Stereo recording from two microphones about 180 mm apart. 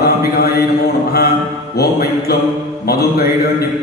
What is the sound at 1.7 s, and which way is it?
Mantra, 60° left (ahead or behind).